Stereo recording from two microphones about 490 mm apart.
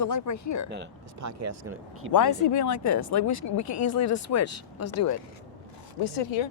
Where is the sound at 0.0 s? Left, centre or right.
Left.